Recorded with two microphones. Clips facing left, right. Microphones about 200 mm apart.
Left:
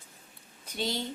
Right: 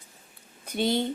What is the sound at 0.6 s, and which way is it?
Speech, 55° right (ahead or behind).